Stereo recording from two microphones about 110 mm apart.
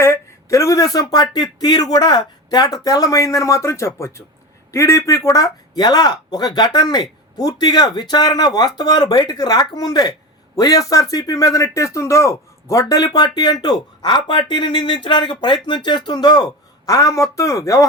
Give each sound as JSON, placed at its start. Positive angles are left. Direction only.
{"t": 0.0, "sound": "speech", "side_deg": 25}